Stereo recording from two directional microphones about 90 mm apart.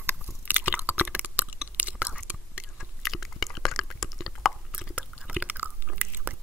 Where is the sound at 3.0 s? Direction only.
Centre (ahead or behind).